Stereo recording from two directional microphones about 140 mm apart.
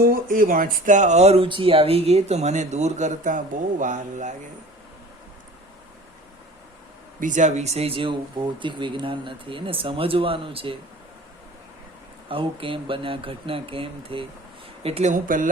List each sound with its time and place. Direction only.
0.0 s speech: 85° right; by 4.4 s 60° right (ahead or behind)
7.2 s speech: 65° right (ahead or behind); by 10.8 s 40° right (ahead or behind)
12.3 s speech: 40° right (ahead or behind)
15.1 s speech: 70° right (ahead or behind)